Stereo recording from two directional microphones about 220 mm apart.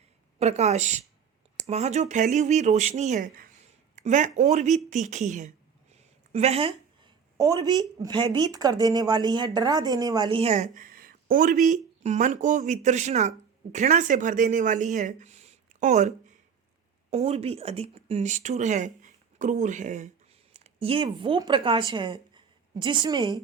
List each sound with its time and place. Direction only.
0.3 s a woman's voice: 30° right (ahead or behind)